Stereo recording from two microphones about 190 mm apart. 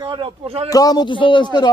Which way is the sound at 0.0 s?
25° right (ahead or behind).